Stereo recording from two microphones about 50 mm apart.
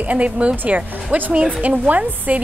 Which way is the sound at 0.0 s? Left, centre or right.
Right.